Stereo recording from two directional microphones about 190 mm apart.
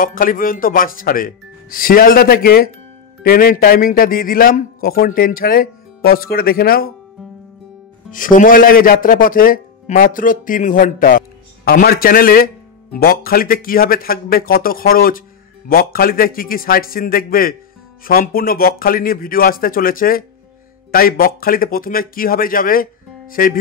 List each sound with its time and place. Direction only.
0.0 s speech: 50° left (ahead or behind)
8.1 s speech: 45° left (ahead or behind)